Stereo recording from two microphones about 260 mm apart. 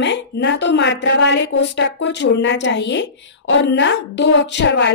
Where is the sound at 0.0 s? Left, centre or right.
Left.